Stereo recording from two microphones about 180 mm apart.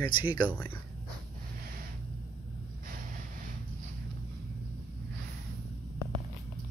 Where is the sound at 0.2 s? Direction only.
25° left (ahead or behind).